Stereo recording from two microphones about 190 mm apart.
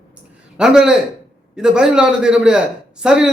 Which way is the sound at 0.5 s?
5° right (ahead or behind).